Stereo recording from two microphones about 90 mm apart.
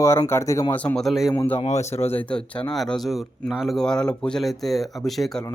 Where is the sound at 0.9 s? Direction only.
Centre (ahead or behind).